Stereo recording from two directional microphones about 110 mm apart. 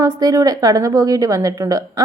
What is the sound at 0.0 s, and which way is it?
A woman's voice, 30° right (ahead or behind).